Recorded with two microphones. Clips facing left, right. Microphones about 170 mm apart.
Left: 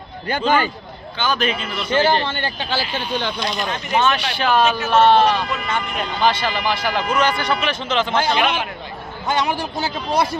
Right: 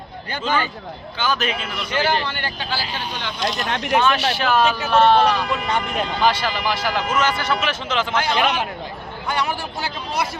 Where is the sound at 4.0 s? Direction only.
5° right (ahead or behind).